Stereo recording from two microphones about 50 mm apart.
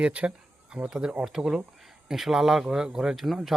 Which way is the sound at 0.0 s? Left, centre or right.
Right.